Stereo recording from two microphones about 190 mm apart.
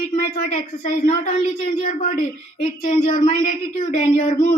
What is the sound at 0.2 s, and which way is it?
A woman's voice, 40° left (ahead or behind).